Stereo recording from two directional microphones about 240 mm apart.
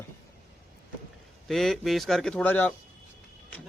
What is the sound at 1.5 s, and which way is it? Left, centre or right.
Speech, centre.